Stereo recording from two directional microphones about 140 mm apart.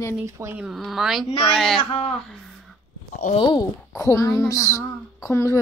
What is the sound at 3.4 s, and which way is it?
Speech, 35° left (ahead or behind).